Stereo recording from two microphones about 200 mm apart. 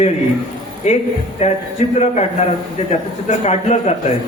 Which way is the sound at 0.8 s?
35° left (ahead or behind).